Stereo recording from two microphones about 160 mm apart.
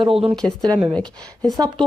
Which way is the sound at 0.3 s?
5° left (ahead or behind).